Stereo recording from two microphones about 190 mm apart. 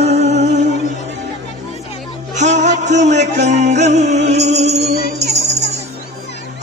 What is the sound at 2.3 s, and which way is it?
Music, 40° right (ahead or behind).